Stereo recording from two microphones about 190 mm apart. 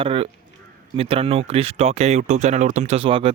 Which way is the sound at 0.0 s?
30° right (ahead or behind).